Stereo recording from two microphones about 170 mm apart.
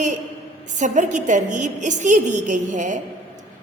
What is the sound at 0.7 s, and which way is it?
A woman's voice, 45° right (ahead or behind).